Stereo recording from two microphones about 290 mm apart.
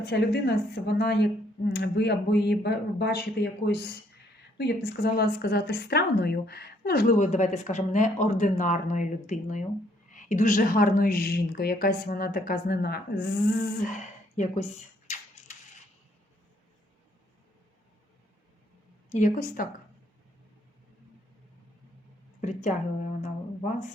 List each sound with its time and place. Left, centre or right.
0.0 s speech: left
19.1 s speech: left